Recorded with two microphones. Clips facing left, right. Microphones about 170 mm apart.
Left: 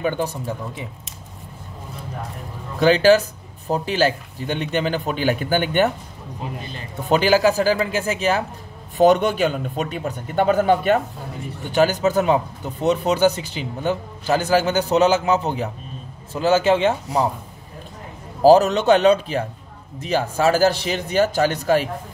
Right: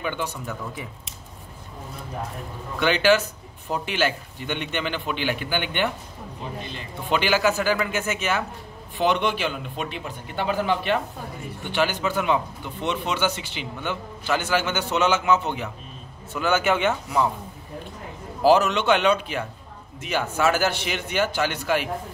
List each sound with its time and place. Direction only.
0.0 s speech: 40° left (ahead or behind)
2.8 s speech: 35° left (ahead or behind)
18.4 s speech: 40° left (ahead or behind)